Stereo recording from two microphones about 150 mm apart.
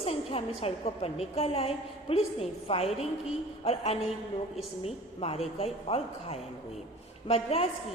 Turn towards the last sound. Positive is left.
turn(degrees=40)  # may be behind; listen again after turning